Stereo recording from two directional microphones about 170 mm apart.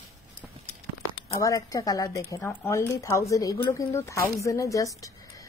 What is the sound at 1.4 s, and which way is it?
A woman's voice, 20° left (ahead or behind).